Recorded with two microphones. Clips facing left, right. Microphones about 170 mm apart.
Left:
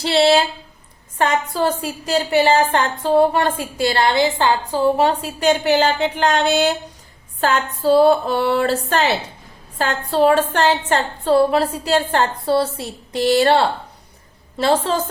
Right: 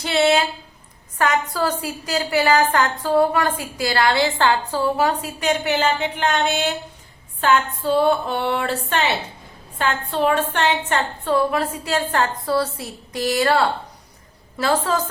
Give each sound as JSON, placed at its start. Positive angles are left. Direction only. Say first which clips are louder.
{"t": 0.0, "sound": "a woman's voice", "louder": "left 3 dB", "side_deg": 30}